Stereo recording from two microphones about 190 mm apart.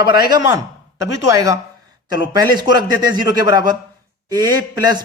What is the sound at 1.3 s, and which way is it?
Speech, 15° right (ahead or behind).